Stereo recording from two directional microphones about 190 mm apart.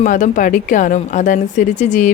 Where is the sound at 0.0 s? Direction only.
40° left (ahead or behind).